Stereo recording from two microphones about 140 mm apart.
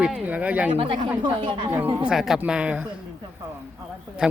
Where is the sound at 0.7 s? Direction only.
40° right (ahead or behind).